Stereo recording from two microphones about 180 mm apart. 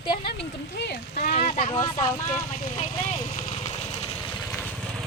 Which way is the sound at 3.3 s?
35° left (ahead or behind).